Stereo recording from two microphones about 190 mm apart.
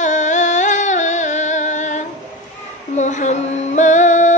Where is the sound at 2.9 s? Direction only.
40° left (ahead or behind).